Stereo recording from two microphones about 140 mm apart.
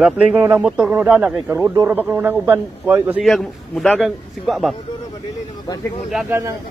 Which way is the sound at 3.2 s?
Centre (ahead or behind).